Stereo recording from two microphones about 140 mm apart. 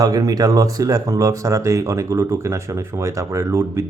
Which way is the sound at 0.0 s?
25° right (ahead or behind).